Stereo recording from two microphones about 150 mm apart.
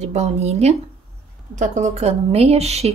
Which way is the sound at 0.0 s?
45° right (ahead or behind).